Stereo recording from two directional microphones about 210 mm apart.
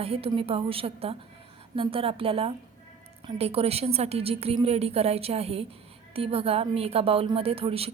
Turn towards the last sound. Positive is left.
turn(degrees=-25)  # may be behind; listen again after turning